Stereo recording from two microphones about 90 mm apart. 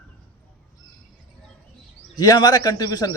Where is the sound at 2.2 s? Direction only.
45° left (ahead or behind).